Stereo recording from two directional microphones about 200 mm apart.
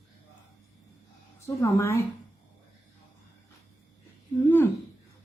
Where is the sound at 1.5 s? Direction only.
15° left (ahead or behind).